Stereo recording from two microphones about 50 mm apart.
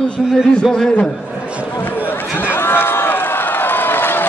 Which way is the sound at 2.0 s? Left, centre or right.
Left.